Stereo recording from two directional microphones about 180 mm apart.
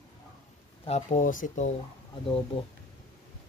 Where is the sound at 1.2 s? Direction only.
50° left (ahead or behind).